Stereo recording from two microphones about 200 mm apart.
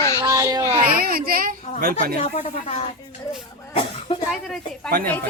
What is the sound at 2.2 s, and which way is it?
Speech, 35° left (ahead or behind).